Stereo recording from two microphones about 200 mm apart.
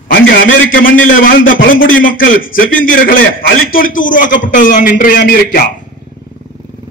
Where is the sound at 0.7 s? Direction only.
45° left (ahead or behind).